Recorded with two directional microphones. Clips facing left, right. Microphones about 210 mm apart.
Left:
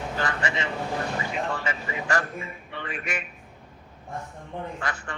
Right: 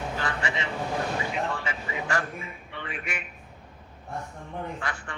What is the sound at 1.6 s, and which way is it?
Speech, 40° left (ahead or behind).